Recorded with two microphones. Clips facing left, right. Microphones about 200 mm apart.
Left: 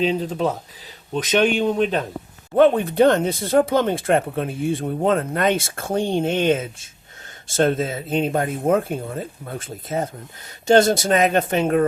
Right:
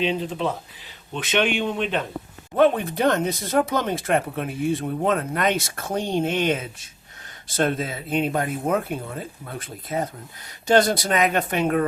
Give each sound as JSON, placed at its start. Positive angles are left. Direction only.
{"t": 0.0, "sound": "speech", "side_deg": 40}